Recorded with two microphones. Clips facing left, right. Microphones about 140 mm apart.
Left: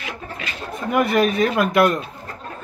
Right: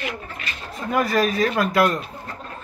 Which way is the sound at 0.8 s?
20° left (ahead or behind).